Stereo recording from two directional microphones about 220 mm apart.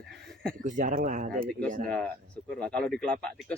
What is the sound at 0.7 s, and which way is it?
Speech, 35° right (ahead or behind).